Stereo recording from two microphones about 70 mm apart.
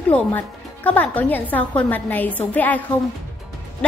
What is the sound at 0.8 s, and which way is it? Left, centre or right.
A woman's voice, left.